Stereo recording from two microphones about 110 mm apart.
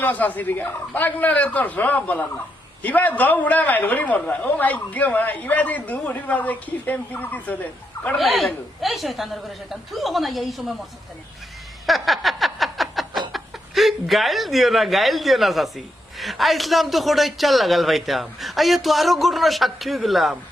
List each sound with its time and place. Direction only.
0.0 s a man's voice: 15° left (ahead or behind)
8.2 s speech: centre (ahead or behind)
11.9 s a sound: centre (ahead or behind)